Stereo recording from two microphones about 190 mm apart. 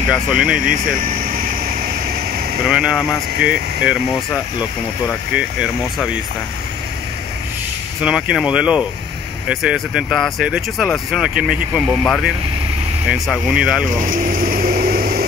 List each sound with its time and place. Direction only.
0.1 s speech: 5° right (ahead or behind)
0.7 s speech: 50° right (ahead or behind)
2.7 s speech: 5° right (ahead or behind)
5.3 s speech: 5° right (ahead or behind)
8.0 s speech: 5° right (ahead or behind)
13.1 s speech: 5° right (ahead or behind)
14.0 s vehicle: 45° right (ahead or behind)